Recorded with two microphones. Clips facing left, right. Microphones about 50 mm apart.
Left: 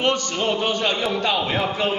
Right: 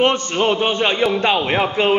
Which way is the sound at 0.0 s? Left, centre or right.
Right.